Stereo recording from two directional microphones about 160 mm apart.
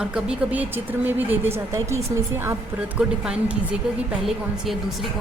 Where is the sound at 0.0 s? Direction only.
5° right (ahead or behind).